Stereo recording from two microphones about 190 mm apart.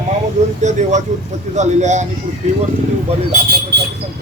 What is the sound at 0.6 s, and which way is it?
A man's voice, 40° right (ahead or behind).